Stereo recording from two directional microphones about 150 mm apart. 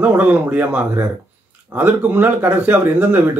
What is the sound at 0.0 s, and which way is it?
Speech, 10° right (ahead or behind).